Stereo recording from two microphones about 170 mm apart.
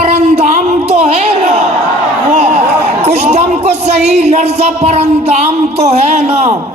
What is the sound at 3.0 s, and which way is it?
Speech, 40° right (ahead or behind).